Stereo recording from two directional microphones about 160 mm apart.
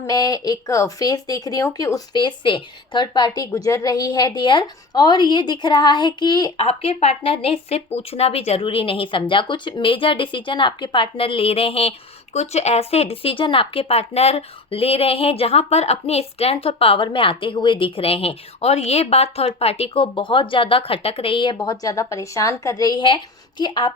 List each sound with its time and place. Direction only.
0.1 s speech: 20° left (ahead or behind)